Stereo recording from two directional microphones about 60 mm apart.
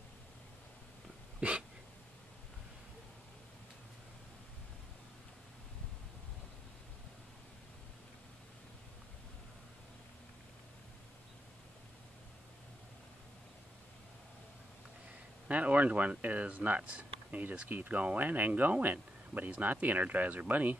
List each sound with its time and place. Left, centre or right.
1.4 s hiccup: right
15.4 s speech: right